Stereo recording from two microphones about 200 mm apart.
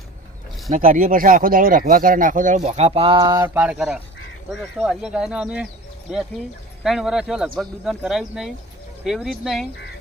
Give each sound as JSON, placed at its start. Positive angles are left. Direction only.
{"t": 0.7, "sound": "speech", "side_deg": -45}